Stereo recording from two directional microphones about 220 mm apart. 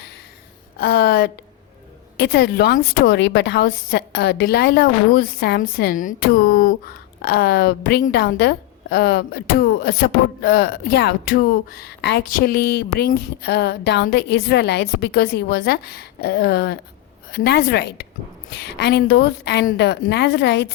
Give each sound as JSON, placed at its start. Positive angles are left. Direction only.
{"t": 0.8, "sound": "a woman's voice", "side_deg": 45}